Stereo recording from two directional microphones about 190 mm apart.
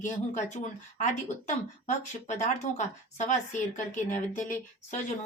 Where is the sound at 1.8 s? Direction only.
40° left (ahead or behind).